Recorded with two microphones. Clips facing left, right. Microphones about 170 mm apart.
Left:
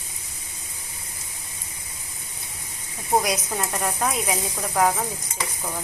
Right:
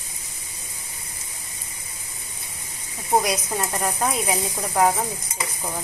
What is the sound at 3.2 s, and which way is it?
Speech, centre (ahead or behind).